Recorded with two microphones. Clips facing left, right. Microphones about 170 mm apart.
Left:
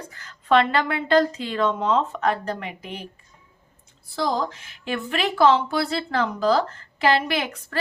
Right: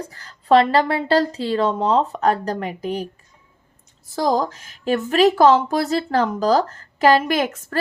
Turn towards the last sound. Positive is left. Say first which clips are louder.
# right 6 dB
turn(degrees=-45)  # may be behind; listen again after turning